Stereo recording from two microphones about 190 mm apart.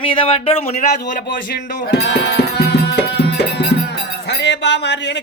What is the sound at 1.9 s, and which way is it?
Music, 60° left (ahead or behind).